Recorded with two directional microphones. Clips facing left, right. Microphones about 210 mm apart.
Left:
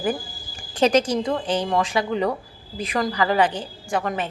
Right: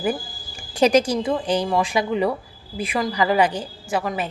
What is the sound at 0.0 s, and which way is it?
Speech, 10° right (ahead or behind).